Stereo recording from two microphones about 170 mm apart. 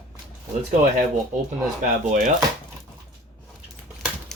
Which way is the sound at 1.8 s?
50° right (ahead or behind).